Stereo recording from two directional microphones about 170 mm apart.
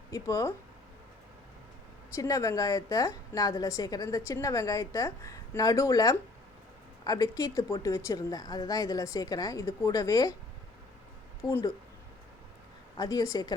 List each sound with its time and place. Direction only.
0.1 s a woman's voice: 20° left (ahead or behind)
2.1 s a woman's voice: 20° left (ahead or behind)
11.4 s a woman's voice: 20° left (ahead or behind)
13.0 s a woman's voice: 20° left (ahead or behind)